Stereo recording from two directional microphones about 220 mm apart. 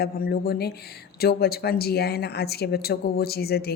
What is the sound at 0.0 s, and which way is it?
A woman's voice, 45° left (ahead or behind).